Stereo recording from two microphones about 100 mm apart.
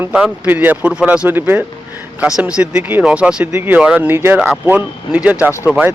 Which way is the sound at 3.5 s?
20° right (ahead or behind).